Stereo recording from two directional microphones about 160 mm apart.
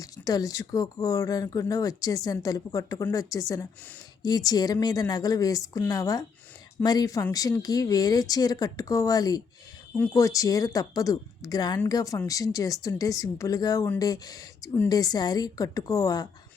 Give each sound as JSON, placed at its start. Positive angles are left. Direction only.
{"t": 0.0, "sound": "speech", "side_deg": 20}